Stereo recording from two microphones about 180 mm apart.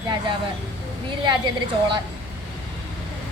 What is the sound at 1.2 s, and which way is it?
Speech, 25° right (ahead or behind).